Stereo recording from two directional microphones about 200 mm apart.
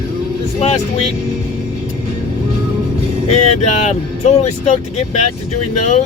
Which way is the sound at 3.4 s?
35° left (ahead or behind).